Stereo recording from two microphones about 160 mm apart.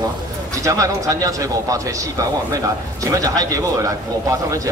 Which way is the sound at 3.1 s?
20° right (ahead or behind).